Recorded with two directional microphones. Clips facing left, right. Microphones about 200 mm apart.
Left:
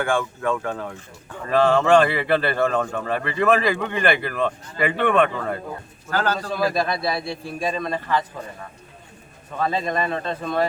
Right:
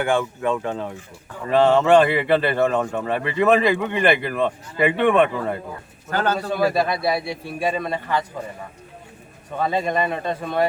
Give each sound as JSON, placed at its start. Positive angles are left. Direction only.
{"t": 0.0, "sound": "a man's voice", "side_deg": -20}
{"t": 6.7, "sound": "speech", "side_deg": -10}
{"t": 9.6, "sound": "speech", "side_deg": -15}